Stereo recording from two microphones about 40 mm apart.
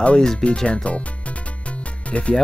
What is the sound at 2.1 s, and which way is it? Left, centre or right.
Speech, left.